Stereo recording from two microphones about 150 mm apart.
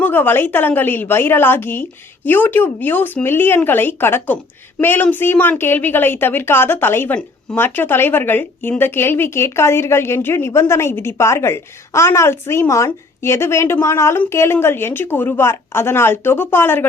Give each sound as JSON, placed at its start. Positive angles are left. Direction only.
{"t": 0.0, "sound": "a woman's voice", "side_deg": 15}